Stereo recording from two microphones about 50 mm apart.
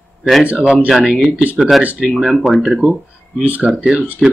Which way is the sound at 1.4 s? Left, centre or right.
Right.